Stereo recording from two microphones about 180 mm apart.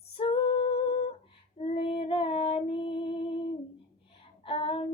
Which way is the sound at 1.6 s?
30° left (ahead or behind).